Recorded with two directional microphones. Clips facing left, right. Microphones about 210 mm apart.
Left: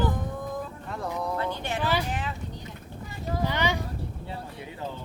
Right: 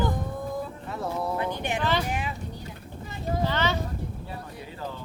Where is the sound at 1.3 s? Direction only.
15° right (ahead or behind).